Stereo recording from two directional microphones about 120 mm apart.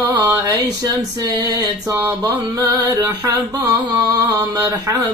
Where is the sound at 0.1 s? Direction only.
15° right (ahead or behind).